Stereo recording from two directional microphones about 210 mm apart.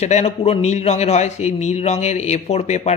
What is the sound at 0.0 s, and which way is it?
A man's voice, 30° left (ahead or behind).